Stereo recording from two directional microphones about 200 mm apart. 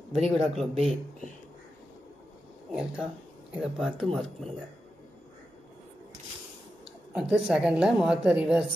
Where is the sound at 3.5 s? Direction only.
5° right (ahead or behind).